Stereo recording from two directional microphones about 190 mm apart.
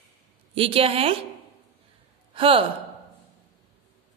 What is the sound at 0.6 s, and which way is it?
Speech, 30° right (ahead or behind).